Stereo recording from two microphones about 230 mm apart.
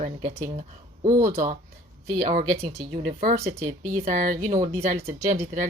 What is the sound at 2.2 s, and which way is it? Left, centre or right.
Speech, right.